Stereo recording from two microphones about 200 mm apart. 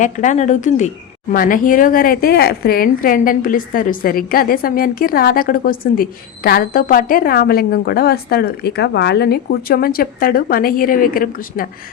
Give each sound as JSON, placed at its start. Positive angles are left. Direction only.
{"t": 0.0, "sound": "a woman's voice", "side_deg": 40}